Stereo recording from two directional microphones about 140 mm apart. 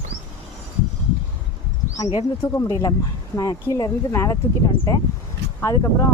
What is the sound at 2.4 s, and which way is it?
Speech, 20° left (ahead or behind).